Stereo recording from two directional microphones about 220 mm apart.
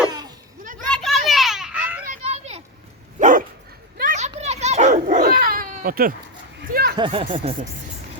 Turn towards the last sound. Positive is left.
turn(degrees=-30)  # may be behind; listen again after turning